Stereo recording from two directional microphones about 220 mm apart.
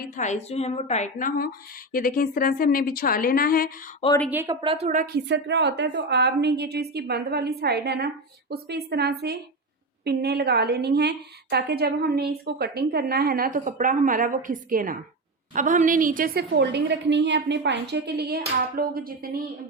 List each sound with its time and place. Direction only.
0.0 s a woman's voice: 35° left (ahead or behind)
4.3 s a woman's voice: 10° right (ahead or behind)
4.6 s a woman's voice: 25° right (ahead or behind)
4.9 s a woman's voice: 35° right (ahead or behind)
5.3 s a woman's voice: 55° right (ahead or behind)